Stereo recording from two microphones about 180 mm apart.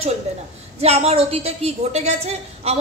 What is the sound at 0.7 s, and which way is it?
A woman's voice, 35° right (ahead or behind).